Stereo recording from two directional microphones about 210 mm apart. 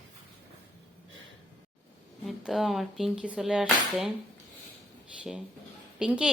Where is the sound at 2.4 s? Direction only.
Centre (ahead or behind).